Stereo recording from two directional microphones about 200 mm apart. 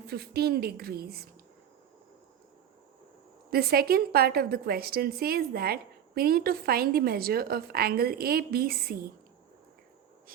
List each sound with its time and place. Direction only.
0.1 s a woman's voice: 50° right (ahead or behind)
3.5 s a woman's voice: 50° right (ahead or behind)